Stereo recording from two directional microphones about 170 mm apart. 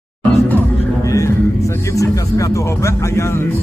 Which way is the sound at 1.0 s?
20° left (ahead or behind).